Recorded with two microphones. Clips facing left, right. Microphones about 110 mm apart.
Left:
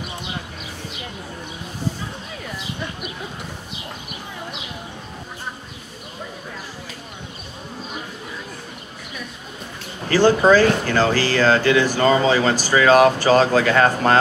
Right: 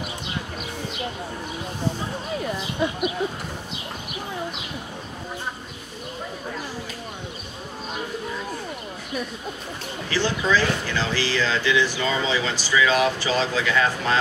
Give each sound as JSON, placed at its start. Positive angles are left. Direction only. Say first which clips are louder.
{"t": 10.0, "sound": "speech", "louder": "left 10 dB", "side_deg": 50}